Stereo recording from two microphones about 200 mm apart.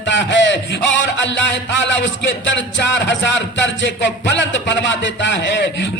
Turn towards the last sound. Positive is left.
turn(degrees=65)  # may be behind; listen again after turning